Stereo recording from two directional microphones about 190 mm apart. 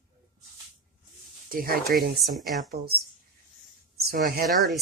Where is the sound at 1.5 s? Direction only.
50° right (ahead or behind).